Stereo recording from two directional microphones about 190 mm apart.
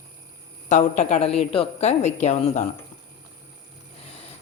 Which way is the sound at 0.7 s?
40° left (ahead or behind).